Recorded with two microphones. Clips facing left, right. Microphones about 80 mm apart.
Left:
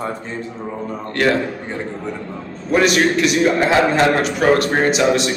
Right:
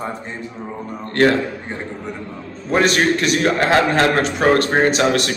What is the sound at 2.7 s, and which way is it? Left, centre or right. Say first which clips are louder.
A man's voice: left 1 dB; right.